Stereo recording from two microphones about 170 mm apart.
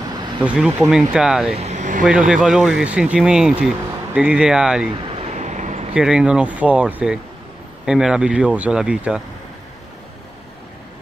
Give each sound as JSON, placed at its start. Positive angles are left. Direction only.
{"t": 0.6, "sound": "speech", "side_deg": -5}
{"t": 1.5, "sound": "vehicle", "side_deg": -40}
{"t": 2.0, "sound": "speech", "side_deg": -5}
{"t": 5.1, "sound": "a sound", "side_deg": -40}
{"t": 5.9, "sound": "speech", "side_deg": -5}